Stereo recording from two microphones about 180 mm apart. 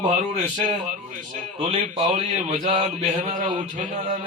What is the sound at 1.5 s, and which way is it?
Speech, 35° right (ahead or behind).